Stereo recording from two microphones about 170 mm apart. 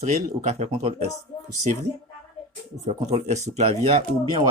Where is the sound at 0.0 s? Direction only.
45° right (ahead or behind).